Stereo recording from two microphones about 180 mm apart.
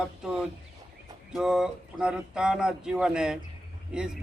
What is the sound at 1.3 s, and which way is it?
Speech, 5° right (ahead or behind).